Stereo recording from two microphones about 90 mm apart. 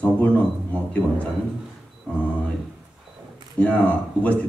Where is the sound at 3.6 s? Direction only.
15° left (ahead or behind).